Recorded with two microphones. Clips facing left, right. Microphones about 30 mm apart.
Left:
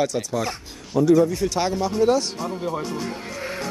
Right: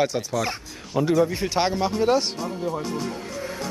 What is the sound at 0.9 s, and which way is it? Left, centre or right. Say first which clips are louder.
Speech: left 4 dB; right.